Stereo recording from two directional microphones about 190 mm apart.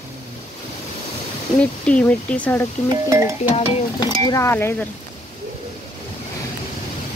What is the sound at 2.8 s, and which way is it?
Speech, 15° right (ahead or behind).